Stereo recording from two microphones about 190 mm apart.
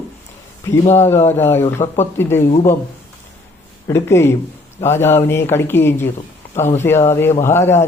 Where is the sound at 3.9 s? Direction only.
15° left (ahead or behind).